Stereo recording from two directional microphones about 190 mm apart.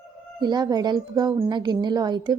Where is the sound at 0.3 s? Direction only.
20° right (ahead or behind).